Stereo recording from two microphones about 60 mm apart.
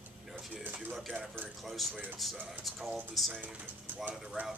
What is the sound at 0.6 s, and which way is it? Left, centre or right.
Speech, right.